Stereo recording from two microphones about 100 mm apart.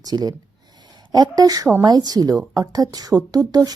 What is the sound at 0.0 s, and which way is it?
A woman's voice, 40° right (ahead or behind).